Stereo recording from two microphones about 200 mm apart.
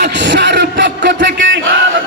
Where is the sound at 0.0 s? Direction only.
60° right (ahead or behind).